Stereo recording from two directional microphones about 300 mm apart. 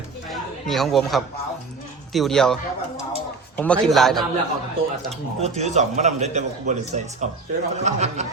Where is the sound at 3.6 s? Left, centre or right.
Centre.